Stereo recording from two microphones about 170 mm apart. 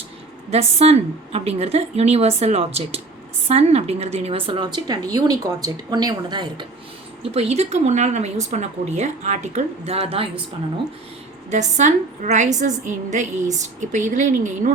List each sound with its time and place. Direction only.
0.5 s a woman's voice: 40° right (ahead or behind)
7.2 s a woman's voice: 35° right (ahead or behind)
11.5 s a woman's voice: 45° right (ahead or behind)